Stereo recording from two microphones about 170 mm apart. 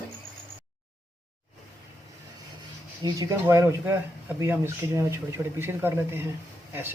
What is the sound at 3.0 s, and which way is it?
Speech, 20° right (ahead or behind).